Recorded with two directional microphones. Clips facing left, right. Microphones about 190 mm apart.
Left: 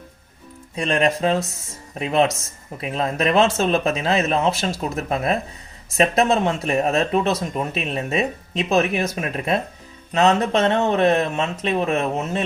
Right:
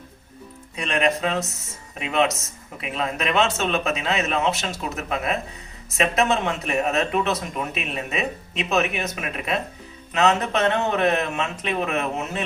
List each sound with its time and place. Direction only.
0.8 s speech: 35° left (ahead or behind)